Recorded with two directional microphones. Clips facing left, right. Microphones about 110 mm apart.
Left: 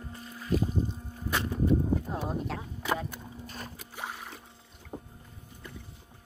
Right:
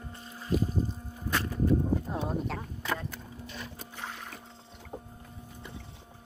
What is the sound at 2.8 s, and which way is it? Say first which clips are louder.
Chop: left 4 dB; 15° left (ahead or behind).